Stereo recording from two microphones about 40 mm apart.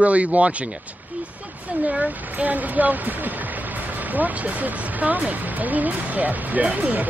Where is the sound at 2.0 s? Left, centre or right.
Right.